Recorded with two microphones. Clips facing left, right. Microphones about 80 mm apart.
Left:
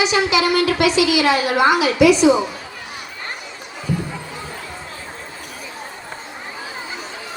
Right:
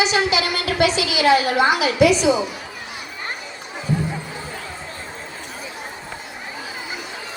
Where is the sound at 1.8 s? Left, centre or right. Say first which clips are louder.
Left 2 dB; right.